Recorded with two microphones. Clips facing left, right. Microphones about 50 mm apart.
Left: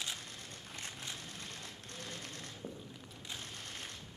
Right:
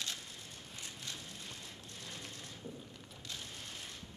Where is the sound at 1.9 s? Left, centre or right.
Left.